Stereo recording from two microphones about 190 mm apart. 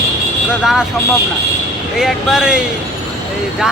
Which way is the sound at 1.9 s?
5° right (ahead or behind).